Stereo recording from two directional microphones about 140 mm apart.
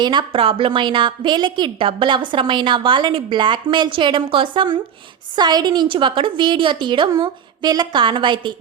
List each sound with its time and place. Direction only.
0.0 s a woman's voice: 35° right (ahead or behind)